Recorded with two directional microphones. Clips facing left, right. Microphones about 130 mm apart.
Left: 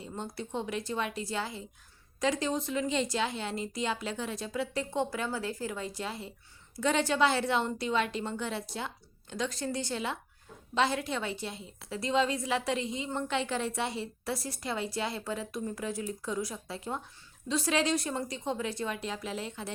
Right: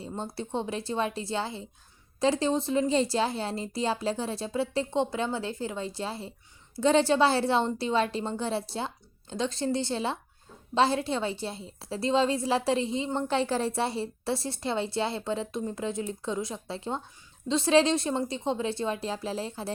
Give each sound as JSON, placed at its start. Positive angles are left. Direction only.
{"t": 0.0, "sound": "a woman's voice", "side_deg": -30}